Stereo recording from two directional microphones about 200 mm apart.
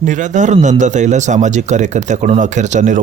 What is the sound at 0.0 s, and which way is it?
Speech, 40° right (ahead or behind).